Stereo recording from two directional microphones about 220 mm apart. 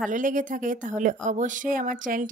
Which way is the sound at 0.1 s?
35° right (ahead or behind).